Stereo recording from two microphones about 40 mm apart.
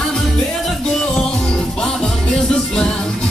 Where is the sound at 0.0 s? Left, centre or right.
Centre.